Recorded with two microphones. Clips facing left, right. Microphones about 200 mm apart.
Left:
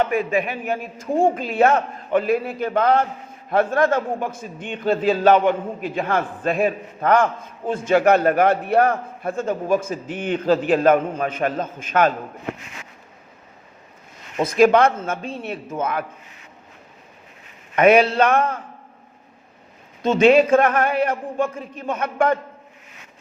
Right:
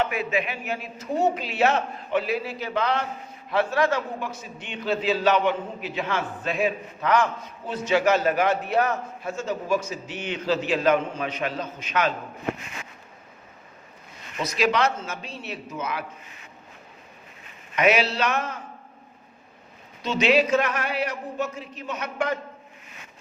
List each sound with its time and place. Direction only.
0.0 s a man's voice: 50° left (ahead or behind)
14.3 s a man's voice: 50° left (ahead or behind)
17.7 s a man's voice: 50° left (ahead or behind)
20.0 s a man's voice: 50° left (ahead or behind)